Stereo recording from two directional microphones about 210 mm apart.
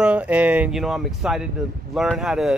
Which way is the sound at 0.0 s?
5° right (ahead or behind).